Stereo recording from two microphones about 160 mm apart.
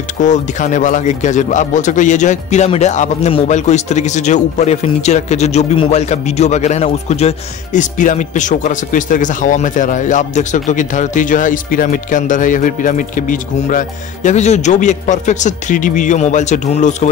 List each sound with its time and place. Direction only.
0.2 s a man's voice: 50° left (ahead or behind)